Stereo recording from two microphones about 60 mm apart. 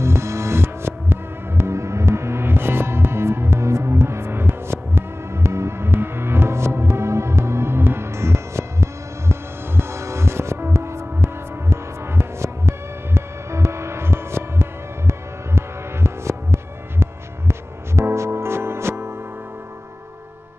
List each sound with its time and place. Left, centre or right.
0.0 s music: right